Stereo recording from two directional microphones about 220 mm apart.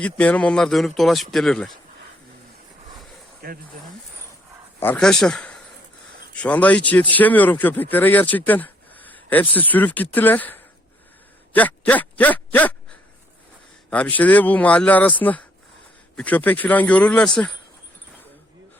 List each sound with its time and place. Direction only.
0.0 s speech: 5° left (ahead or behind)
3.4 s speech: 45° right (ahead or behind)
4.8 s a man's voice: 5° left (ahead or behind)
11.5 s a sound: 5° left (ahead or behind)
13.9 s a man's voice: 5° left (ahead or behind)